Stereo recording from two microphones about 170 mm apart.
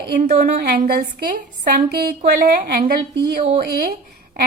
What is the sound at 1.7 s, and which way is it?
A woman's voice, 70° right (ahead or behind).